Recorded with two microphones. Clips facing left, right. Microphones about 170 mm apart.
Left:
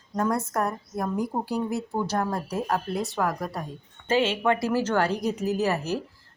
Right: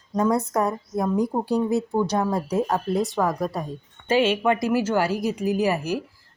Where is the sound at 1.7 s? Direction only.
15° right (ahead or behind).